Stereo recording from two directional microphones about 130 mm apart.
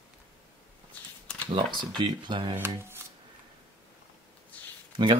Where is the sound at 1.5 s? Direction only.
40° right (ahead or behind).